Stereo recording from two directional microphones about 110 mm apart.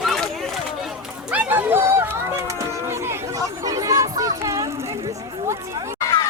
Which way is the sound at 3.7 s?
35° right (ahead or behind).